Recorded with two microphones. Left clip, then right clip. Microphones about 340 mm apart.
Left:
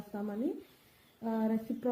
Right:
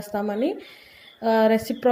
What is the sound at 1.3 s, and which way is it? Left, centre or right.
Speech, right.